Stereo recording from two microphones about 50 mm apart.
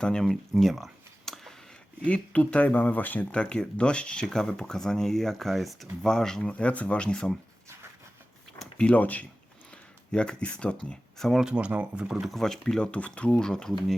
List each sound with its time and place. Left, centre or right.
0.0 s speech: centre
0.6 s a sound: centre
2.0 s speech: left
3.3 s speech: centre
6.4 s speech: left
8.8 s speech: left
9.7 s speech: centre
11.2 s speech: centre
11.5 s speech: right
12.3 s speech: centre
13.5 s speech: centre